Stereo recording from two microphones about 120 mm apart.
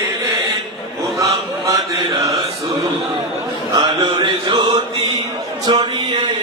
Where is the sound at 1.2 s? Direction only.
25° right (ahead or behind).